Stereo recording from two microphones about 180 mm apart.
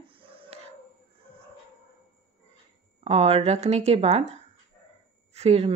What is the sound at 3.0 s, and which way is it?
A woman's voice, 35° right (ahead or behind).